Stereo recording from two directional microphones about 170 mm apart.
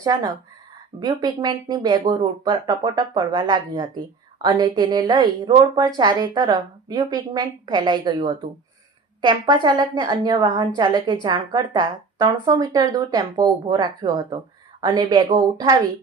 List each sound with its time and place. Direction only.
0.0 s a woman's voice: 20° right (ahead or behind)